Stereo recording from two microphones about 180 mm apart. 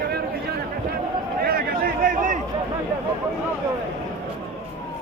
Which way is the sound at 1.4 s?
55° right (ahead or behind).